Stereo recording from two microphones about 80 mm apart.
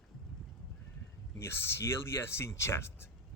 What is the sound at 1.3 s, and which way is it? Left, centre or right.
Speech, left.